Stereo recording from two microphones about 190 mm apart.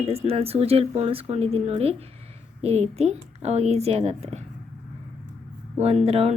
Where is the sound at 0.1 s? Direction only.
30° right (ahead or behind).